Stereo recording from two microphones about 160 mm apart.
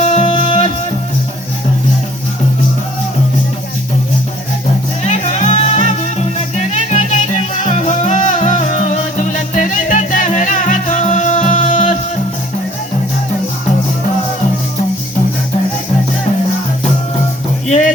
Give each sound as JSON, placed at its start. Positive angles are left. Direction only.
{"t": 0.0, "sound": "music", "side_deg": 45}
{"t": 5.0, "sound": "music", "side_deg": 45}
{"t": 17.7, "sound": "music", "side_deg": 50}